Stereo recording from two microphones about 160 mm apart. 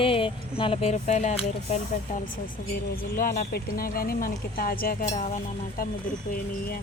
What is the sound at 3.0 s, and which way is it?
Speech, 60° left (ahead or behind).